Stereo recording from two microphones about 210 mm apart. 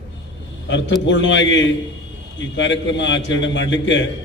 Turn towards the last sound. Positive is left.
turn(degrees=60)  # may be behind; listen again after turning